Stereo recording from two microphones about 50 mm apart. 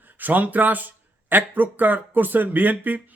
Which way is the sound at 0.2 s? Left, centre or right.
Right.